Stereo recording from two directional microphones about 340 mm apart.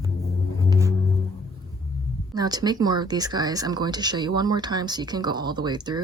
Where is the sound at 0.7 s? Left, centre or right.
Centre.